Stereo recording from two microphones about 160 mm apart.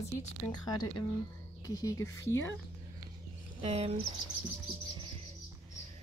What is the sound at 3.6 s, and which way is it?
Speech, 40° right (ahead or behind).